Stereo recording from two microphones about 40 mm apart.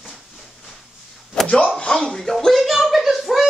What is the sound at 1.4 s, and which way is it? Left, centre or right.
Slap, left.